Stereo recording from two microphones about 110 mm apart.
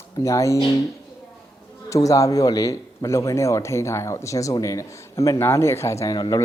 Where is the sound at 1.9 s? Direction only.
30° left (ahead or behind).